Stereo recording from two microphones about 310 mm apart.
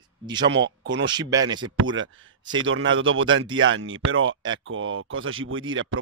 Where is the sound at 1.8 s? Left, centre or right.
Right.